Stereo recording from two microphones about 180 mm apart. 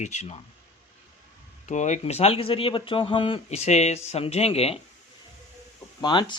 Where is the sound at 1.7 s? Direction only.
40° left (ahead or behind).